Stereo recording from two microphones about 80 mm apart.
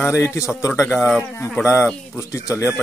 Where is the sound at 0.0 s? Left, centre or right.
Left.